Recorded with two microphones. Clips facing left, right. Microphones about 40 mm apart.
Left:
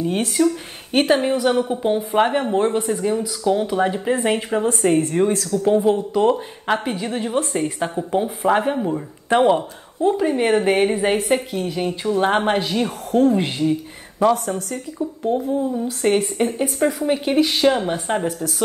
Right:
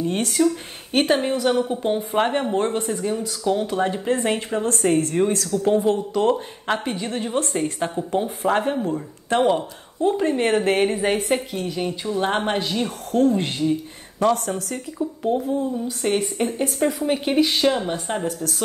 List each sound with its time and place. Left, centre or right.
0.0 s speech: centre
1.8 s speech: centre
15.7 s a woman's voice: centre
16.5 s speech: centre
18.1 s speech: left